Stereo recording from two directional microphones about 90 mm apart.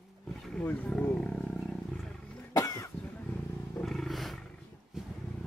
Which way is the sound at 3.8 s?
5° left (ahead or behind).